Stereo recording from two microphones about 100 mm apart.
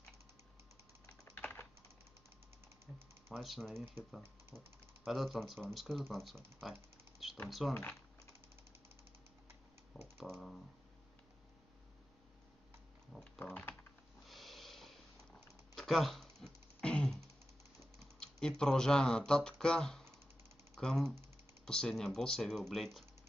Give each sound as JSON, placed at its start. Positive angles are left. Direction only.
{"t": 1.3, "sound": "typing", "side_deg": 25}
{"t": 2.9, "sound": "typing", "side_deg": 0}
{"t": 3.3, "sound": "speech", "side_deg": 0}
{"t": 9.9, "sound": "computer keyboard", "side_deg": 0}
{"t": 13.2, "sound": "typing", "side_deg": 15}
{"t": 14.2, "sound": "sniff", "side_deg": 0}
{"t": 18.2, "sound": "speech", "side_deg": 5}